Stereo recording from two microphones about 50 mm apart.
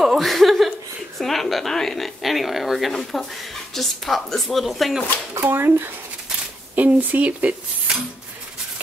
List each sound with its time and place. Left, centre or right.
0.0 s chuckle: centre
2.9 s a woman's voice: centre
5.4 s speech: right
6.7 s speech: right